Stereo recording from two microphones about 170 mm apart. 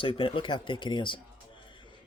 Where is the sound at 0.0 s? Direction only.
30° left (ahead or behind).